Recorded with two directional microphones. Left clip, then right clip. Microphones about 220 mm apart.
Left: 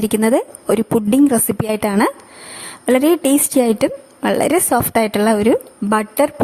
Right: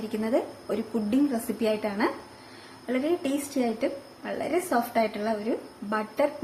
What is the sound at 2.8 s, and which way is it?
A woman's voice, 50° left (ahead or behind).